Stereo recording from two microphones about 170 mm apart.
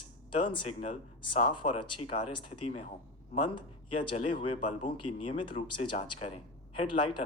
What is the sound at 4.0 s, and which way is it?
A man's voice, 30° left (ahead or behind).